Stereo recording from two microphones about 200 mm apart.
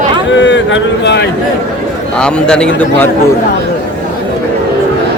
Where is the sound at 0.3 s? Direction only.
65° left (ahead or behind).